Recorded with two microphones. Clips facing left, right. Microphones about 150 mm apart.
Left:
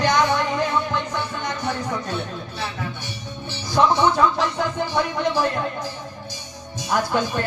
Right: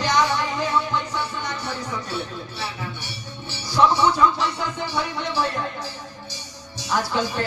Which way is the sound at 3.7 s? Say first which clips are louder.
Left 1 dB; 50° left (ahead or behind).